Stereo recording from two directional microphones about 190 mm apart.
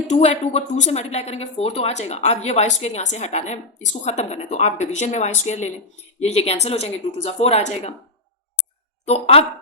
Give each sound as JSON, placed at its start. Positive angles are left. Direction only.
{"t": 0.1, "sound": "speech", "side_deg": 35}
{"t": 9.0, "sound": "speech", "side_deg": 35}